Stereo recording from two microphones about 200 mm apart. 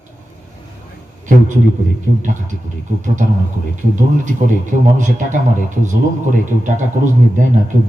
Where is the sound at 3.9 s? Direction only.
40° right (ahead or behind).